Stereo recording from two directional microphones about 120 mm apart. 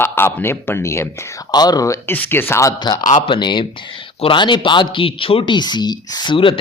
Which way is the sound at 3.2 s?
40° left (ahead or behind).